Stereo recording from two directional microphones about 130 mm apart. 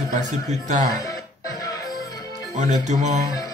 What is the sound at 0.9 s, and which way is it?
Music, 25° left (ahead or behind).